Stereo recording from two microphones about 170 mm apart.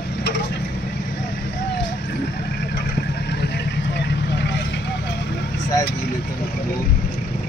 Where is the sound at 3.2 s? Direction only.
80° left.